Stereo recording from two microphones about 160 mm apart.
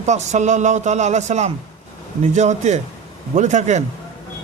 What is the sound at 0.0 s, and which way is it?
A man's voice, 45° right (ahead or behind).